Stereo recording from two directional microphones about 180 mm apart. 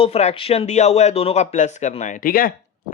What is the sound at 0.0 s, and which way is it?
Speech, 35° left (ahead or behind).